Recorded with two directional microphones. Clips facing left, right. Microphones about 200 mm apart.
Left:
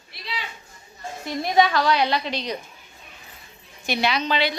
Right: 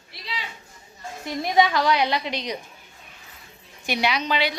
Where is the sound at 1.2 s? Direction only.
20° right (ahead or behind).